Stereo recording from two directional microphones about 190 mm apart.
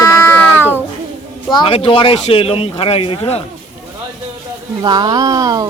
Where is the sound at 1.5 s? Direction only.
25° left (ahead or behind).